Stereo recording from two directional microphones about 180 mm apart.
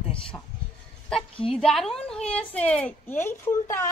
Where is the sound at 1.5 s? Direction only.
Centre (ahead or behind).